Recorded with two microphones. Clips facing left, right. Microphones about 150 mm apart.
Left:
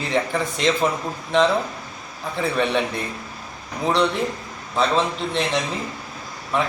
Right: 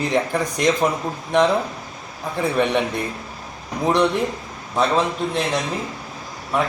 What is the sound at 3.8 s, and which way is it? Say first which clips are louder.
A man's voice: right 2 dB; 15° right (ahead or behind).